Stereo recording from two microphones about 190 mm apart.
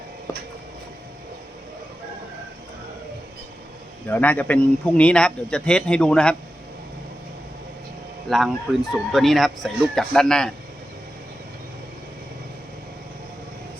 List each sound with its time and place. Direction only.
0.3 s a sound: 20° left (ahead or behind)
4.1 s a man's voice: 10° left (ahead or behind)
8.3 s a man's voice: centre (ahead or behind)